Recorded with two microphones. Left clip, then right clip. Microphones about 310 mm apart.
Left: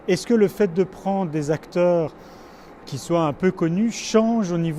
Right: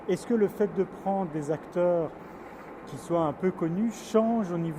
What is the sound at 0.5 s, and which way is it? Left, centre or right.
Speech, left.